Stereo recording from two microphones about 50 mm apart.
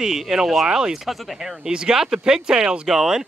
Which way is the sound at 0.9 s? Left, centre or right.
Centre.